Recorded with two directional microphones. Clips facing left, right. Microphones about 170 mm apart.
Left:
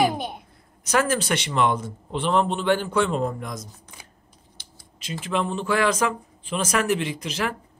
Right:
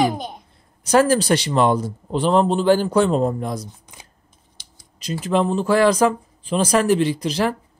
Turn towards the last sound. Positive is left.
turn(degrees=-35)  # may be behind; listen again after turning